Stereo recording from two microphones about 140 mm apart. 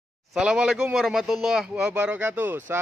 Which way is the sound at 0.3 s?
5° right (ahead or behind).